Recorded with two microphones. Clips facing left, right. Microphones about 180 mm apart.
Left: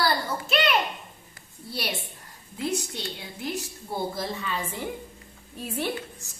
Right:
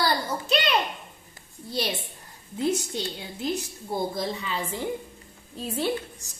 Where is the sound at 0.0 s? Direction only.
20° right (ahead or behind).